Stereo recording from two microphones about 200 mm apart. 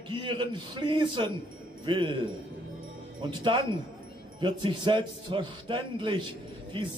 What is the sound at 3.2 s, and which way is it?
A man's voice, 25° right (ahead or behind).